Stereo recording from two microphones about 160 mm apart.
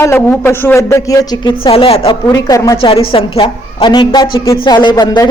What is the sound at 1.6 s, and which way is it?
Speech, 35° left (ahead or behind).